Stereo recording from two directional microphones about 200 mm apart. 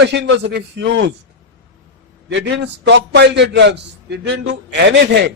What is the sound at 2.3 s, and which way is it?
A man's voice, 65° right (ahead or behind).